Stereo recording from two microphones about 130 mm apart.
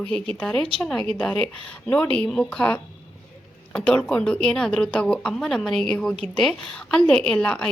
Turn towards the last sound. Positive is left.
turn(degrees=5)  # may be behind; listen again after turning